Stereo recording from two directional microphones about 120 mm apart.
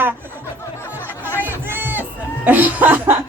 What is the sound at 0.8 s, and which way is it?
Music, 20° left (ahead or behind).